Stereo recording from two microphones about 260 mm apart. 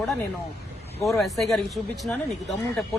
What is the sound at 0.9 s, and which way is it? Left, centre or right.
A man's voice, centre.